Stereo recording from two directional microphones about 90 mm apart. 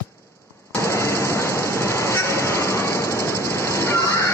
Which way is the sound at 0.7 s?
30° left (ahead or behind).